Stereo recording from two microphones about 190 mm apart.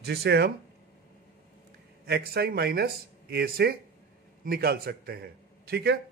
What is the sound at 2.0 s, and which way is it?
A man's voice, 55° right (ahead or behind).